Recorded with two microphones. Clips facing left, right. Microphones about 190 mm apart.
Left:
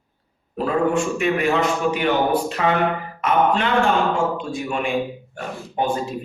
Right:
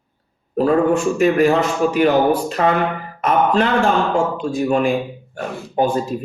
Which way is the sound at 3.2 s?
40° right (ahead or behind).